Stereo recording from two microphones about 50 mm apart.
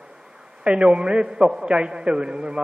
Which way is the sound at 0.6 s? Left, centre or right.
Right.